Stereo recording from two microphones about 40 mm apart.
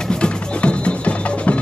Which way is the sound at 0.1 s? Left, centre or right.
Left.